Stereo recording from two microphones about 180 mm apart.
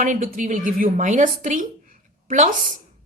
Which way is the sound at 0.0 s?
45° right (ahead or behind).